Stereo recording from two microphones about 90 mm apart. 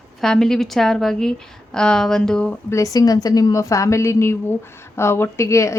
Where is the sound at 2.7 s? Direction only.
35° left (ahead or behind).